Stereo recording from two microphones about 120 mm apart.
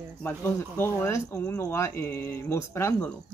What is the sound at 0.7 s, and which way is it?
Speech, 20° left (ahead or behind).